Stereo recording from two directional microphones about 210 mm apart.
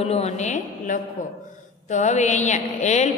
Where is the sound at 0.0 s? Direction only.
30° left (ahead or behind).